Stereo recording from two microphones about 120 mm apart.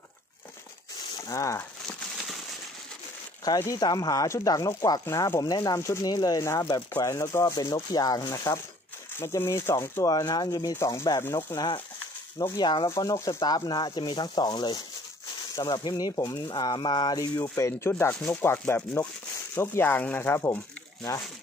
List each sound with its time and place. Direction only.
1.2 s speech: 25° left (ahead or behind)
3.4 s speech: 30° left (ahead or behind)
10.0 s speech: 30° left (ahead or behind)
12.8 s speech: 25° left (ahead or behind)